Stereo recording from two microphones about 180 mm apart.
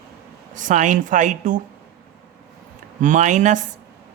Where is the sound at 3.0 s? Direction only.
45° right (ahead or behind).